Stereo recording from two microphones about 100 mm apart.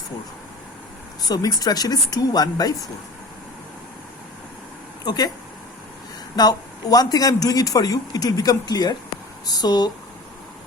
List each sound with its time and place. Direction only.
1.3 s a man's voice: 40° left (ahead or behind)
5.0 s a man's voice: 40° left (ahead or behind)
6.3 s a man's voice: 40° left (ahead or behind)